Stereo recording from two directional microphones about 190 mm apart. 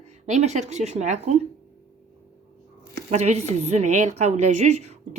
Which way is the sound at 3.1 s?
35° right (ahead or behind).